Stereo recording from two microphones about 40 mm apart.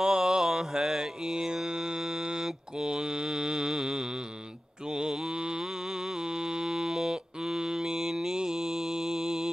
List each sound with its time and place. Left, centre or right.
0.0 s mantra: centre